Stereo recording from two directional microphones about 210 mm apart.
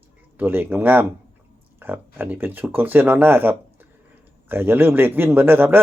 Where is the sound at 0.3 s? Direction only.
10° right (ahead or behind).